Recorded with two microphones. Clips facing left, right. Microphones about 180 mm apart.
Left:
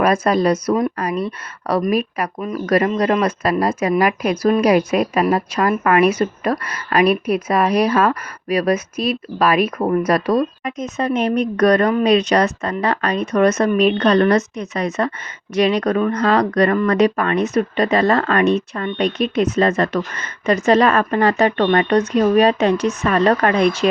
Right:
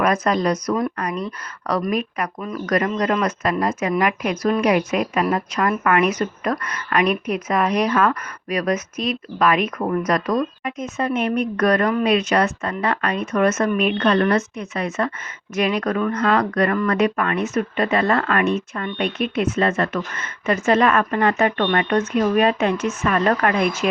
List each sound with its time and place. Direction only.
0.0 s a woman's voice: 30° left (ahead or behind)